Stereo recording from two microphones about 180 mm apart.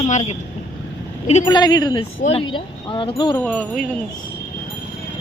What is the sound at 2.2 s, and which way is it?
Speech, 35° left (ahead or behind).